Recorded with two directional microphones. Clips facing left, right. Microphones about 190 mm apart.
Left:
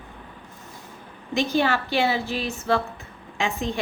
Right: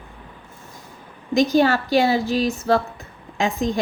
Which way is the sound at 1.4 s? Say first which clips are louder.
Right 6 dB; 40° right (ahead or behind).